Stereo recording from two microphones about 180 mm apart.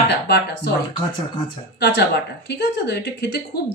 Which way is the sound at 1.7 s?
70° left (ahead or behind).